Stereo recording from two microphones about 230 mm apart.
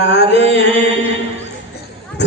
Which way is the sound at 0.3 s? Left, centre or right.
Right.